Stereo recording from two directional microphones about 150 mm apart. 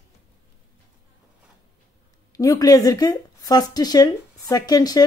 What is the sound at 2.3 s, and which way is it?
Speech, 25° left (ahead or behind).